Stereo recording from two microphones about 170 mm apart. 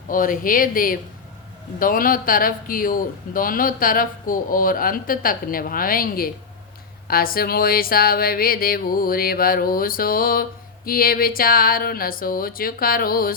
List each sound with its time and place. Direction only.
0.1 s speech: 55° left (ahead or behind)